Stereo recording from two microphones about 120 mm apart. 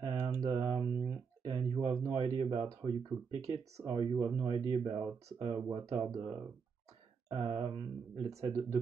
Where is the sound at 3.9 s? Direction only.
45° right (ahead or behind).